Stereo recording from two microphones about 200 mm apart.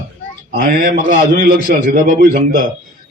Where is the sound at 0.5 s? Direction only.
50° right (ahead or behind).